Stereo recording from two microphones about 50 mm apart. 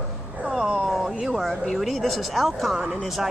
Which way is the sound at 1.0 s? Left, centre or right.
Centre.